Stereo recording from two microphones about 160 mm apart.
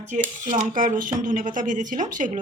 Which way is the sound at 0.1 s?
50° right (ahead or behind).